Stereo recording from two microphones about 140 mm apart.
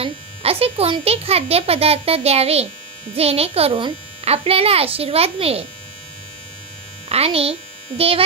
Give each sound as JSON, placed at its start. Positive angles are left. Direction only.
{"t": 0.0, "sound": "speech", "side_deg": -45}
{"t": 7.1, "sound": "speech", "side_deg": -45}